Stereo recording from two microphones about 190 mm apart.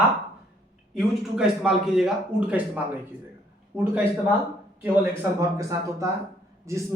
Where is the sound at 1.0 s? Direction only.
Centre (ahead or behind).